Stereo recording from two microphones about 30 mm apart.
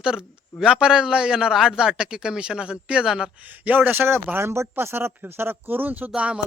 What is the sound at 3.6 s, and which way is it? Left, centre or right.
Speech, right.